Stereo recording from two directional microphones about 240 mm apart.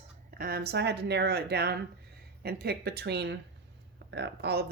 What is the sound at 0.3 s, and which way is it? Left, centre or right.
Speech, right.